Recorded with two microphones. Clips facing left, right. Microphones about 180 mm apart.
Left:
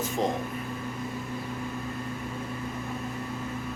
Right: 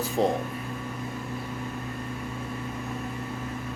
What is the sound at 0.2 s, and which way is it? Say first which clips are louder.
Speech: right 4 dB; centre (ahead or behind).